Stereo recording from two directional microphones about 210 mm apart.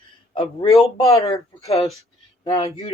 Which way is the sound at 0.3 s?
20° left (ahead or behind).